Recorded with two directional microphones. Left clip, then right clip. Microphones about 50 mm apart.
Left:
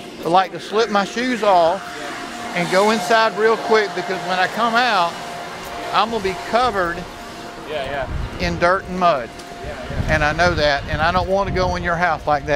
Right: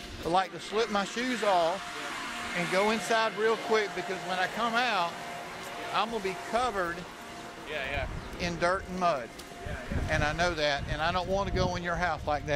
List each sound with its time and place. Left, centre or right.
0.3 s speech: centre
8.4 s speech: centre